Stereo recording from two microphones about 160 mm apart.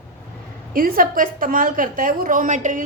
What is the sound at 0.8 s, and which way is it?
A woman's voice, 65° right (ahead or behind).